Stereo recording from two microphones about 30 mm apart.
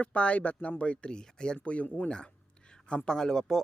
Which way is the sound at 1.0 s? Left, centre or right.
Left.